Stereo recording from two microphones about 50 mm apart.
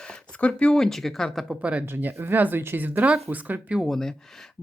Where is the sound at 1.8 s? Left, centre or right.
Right.